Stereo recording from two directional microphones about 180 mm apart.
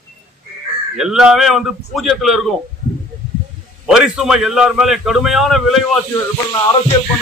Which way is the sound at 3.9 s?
5° right (ahead or behind).